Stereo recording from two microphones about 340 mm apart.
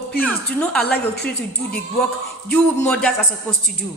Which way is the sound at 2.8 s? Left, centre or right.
Centre.